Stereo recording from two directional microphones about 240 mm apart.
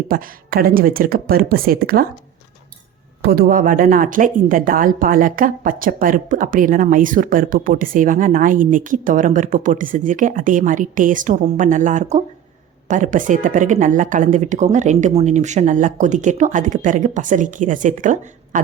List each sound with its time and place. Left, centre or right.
0.1 s a woman's voice: right
3.2 s a woman's voice: right